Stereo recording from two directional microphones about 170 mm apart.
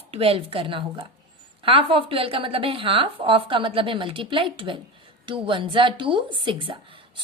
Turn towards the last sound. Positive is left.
turn(degrees=-30)  # may be behind; listen again after turning